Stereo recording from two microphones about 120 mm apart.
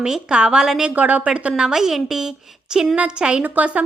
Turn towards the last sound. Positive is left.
turn(degrees=-10)  # may be behind; listen again after turning